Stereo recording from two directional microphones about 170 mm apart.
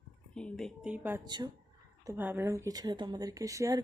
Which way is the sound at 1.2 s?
25° right (ahead or behind).